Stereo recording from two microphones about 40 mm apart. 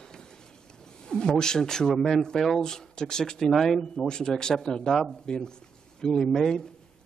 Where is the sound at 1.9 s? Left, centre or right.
Centre.